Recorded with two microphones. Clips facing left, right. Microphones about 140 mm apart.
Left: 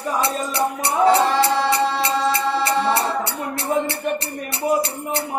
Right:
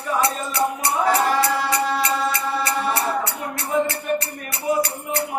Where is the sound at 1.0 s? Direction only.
30° left (ahead or behind).